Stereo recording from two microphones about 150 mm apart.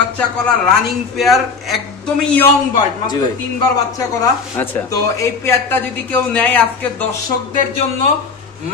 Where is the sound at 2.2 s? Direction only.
10° left (ahead or behind).